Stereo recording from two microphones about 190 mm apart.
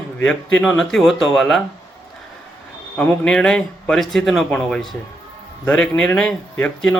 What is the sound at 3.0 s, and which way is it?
A man's voice, 5° left (ahead or behind).